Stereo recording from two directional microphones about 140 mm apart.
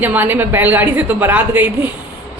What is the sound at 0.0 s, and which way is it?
A woman's voice, 10° right (ahead or behind).